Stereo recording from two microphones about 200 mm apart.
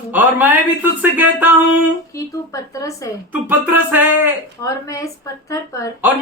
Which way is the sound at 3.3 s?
10° right (ahead or behind).